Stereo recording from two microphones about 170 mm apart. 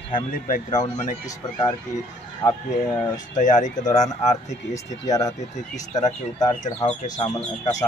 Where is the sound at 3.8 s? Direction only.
20° left (ahead or behind).